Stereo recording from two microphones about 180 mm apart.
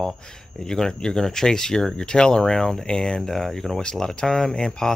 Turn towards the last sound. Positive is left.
turn(degrees=5)  # may be behind; listen again after turning